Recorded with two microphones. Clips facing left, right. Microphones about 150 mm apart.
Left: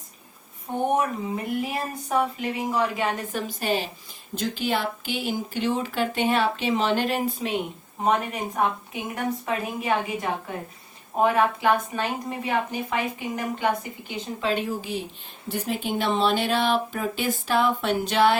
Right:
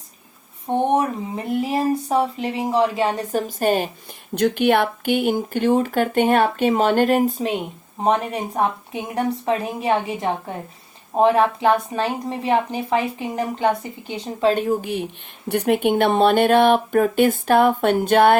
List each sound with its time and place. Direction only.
0.9 s speech: 30° right (ahead or behind); by 3.8 s 50° right (ahead or behind)
4.4 s speech: 60° right (ahead or behind); by 7.5 s 45° right (ahead or behind)
8.0 s speech: 30° right (ahead or behind)
14.4 s speech: 50° right (ahead or behind)